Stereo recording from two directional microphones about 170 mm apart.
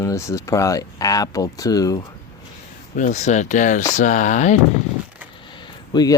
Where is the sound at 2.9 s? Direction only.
45° left (ahead or behind).